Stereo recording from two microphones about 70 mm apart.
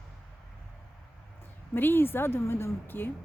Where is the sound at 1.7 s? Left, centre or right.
Left.